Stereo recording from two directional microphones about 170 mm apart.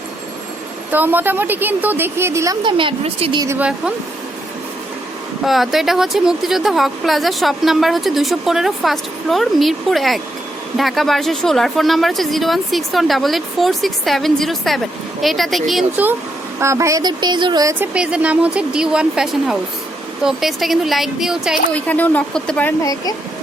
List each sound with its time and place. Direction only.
0.9 s a woman's voice: 10° right (ahead or behind)
2.6 s speech: 30° right (ahead or behind)
3.4 s a woman's voice: 15° right (ahead or behind)
5.5 s speech: centre (ahead or behind)
16.6 s speech: 15° right (ahead or behind)
17.9 s speech: 5° right (ahead or behind)
21.8 s speech: 10° left (ahead or behind)
22.8 s speech: 20° left (ahead or behind)